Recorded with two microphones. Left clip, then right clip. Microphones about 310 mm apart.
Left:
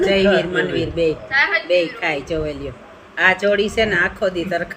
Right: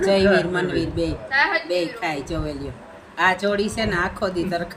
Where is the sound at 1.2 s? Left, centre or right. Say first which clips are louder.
Even; centre.